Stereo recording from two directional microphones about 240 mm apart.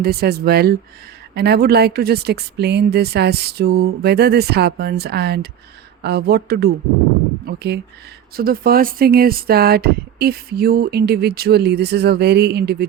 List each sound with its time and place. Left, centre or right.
0.0 s speech: right